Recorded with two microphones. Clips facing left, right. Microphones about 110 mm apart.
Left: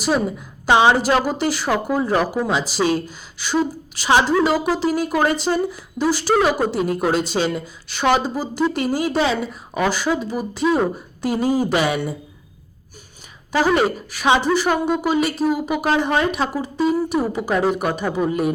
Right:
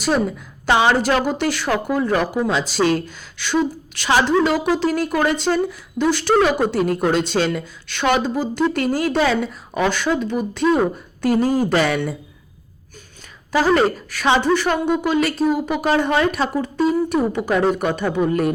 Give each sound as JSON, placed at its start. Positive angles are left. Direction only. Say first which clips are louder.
{"t": 0.7, "sound": "speech", "louder": "left 2 dB", "side_deg": 15}
{"t": 1.2, "sound": "speech", "louder": "right 1 dB", "side_deg": 5}
{"t": 14.4, "sound": "speech", "louder": "even", "side_deg": 5}